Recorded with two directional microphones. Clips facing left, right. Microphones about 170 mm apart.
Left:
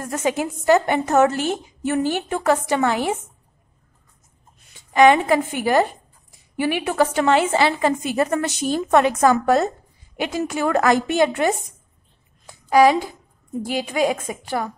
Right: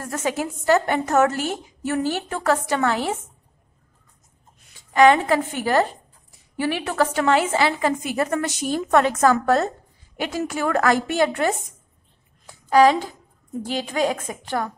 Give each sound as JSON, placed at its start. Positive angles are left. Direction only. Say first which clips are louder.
{"t": 0.0, "sound": "a woman's voice", "louder": "left 3 dB", "side_deg": 20}
{"t": 4.9, "sound": "a woman's voice", "louder": "left 1 dB", "side_deg": 15}
{"t": 9.0, "sound": "a woman's voice", "louder": "left 2 dB", "side_deg": 15}
{"t": 12.6, "sound": "a woman's voice", "louder": "left 1 dB", "side_deg": 10}